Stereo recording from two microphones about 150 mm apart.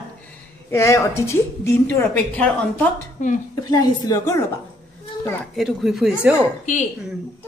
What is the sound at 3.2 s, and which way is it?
Speech, 50° left (ahead or behind).